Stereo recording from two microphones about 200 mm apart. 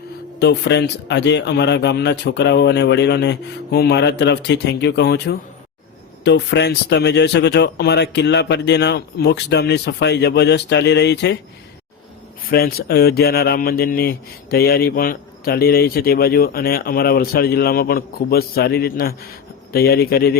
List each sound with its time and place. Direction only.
0.3 s speech: 55° left (ahead or behind)
12.5 s speech: 50° left (ahead or behind)